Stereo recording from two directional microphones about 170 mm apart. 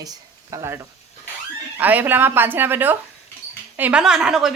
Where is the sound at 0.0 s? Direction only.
20° right (ahead or behind).